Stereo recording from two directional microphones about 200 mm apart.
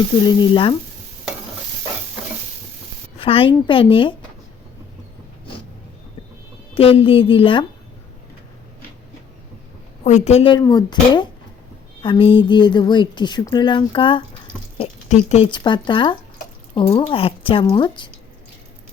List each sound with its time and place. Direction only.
0.3 s speech: 25° left (ahead or behind)
3.2 s speech: 25° left (ahead or behind)
6.7 s speech: 30° left (ahead or behind)
10.0 s speech: 35° left (ahead or behind)